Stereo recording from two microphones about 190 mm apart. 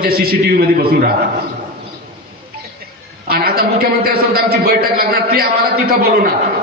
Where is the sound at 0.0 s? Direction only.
50° right (ahead or behind).